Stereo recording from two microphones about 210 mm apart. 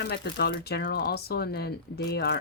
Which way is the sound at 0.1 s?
50° left (ahead or behind).